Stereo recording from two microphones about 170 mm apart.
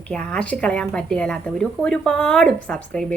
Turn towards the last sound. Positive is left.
turn(degrees=5)  # may be behind; listen again after turning